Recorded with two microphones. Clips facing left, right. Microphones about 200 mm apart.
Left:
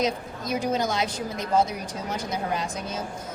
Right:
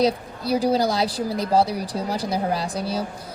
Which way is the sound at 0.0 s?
35° right (ahead or behind).